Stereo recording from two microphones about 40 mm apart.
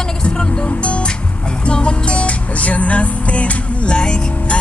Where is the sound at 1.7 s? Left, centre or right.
Left.